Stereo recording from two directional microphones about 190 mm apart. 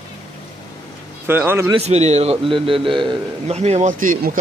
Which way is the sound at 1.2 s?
10° right (ahead or behind).